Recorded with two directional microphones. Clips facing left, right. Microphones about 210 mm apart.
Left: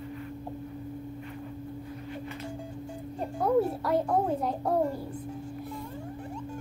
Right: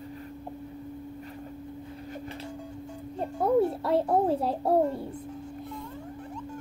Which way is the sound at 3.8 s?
30° right (ahead or behind).